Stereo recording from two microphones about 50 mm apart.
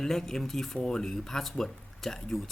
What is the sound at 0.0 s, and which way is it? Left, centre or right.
Speech, centre.